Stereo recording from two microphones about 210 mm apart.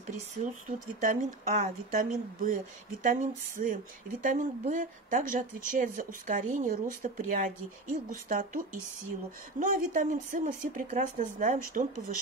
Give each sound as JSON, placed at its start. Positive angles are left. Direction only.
{"t": 0.4, "sound": "speech", "side_deg": -35}